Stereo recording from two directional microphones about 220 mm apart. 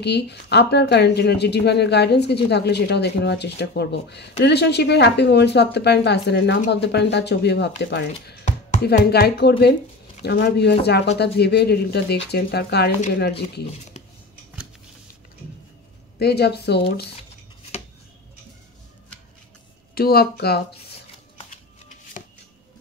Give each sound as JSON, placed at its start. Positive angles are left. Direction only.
{"t": 0.0, "sound": "speech", "side_deg": 50}
{"t": 16.2, "sound": "speech", "side_deg": 45}
{"t": 19.9, "sound": "speech", "side_deg": 45}